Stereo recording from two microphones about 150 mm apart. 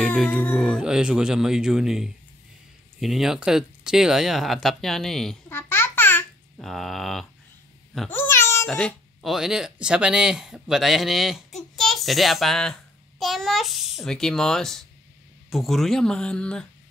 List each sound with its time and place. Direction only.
0.3 s speech: 10° left (ahead or behind)
0.6 s speech: centre (ahead or behind)
5.5 s babbling: 15° left (ahead or behind)
6.6 s speech: centre (ahead or behind)
8.1 s meow: 15° left (ahead or behind)
8.6 s speech: 5° left (ahead or behind)